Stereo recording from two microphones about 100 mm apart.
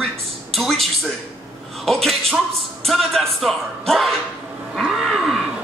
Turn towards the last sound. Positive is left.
turn(degrees=0)  # may be behind; listen again after turning